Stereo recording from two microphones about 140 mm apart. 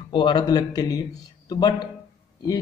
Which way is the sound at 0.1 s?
35° left (ahead or behind).